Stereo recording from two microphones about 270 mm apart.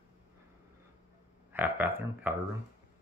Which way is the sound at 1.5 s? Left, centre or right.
Centre.